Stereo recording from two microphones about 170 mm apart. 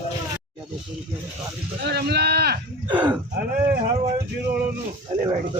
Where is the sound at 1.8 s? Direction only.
70° right (ahead or behind).